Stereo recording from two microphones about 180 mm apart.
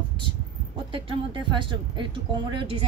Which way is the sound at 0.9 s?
30° right (ahead or behind).